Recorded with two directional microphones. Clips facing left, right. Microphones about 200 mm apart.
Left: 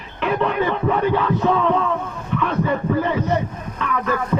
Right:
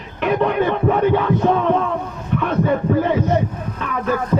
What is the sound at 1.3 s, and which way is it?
Music, 50° right (ahead or behind).